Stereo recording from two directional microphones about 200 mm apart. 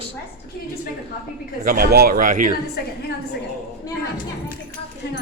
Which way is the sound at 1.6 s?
45° right (ahead or behind).